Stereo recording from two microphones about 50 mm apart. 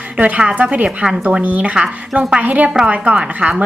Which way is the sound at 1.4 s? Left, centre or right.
Right.